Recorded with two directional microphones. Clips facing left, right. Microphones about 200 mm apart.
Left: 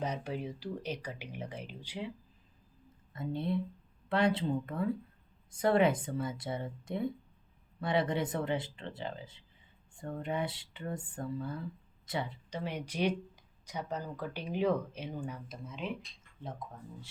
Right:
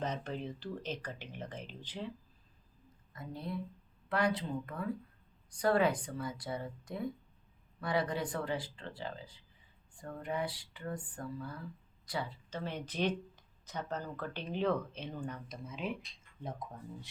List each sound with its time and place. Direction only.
0.0 s speech: 10° left (ahead or behind)
3.1 s speech: 25° left (ahead or behind); by 16.0 s centre (ahead or behind)